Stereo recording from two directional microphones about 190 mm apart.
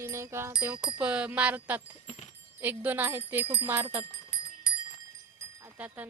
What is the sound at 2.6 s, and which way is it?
Speech, 10° right (ahead or behind).